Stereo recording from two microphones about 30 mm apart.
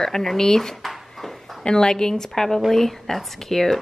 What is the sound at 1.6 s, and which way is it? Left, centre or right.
Speech, left.